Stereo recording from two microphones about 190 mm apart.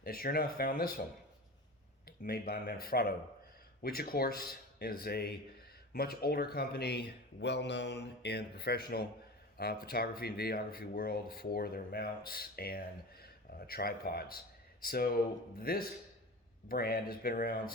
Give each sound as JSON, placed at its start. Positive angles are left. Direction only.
{"t": 0.0, "sound": "speech", "side_deg": 50}
{"t": 2.0, "sound": "speech", "side_deg": 50}